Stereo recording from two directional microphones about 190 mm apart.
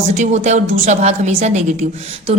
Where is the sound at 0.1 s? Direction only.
35° right (ahead or behind).